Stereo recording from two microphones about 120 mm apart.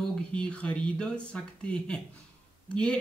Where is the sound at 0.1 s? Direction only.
10° left (ahead or behind).